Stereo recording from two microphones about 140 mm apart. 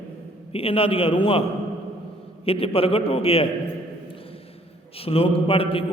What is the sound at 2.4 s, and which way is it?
A man's voice, 45° left (ahead or behind).